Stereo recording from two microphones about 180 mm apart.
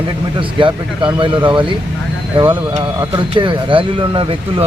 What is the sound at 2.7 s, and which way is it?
Speech, 30° right (ahead or behind).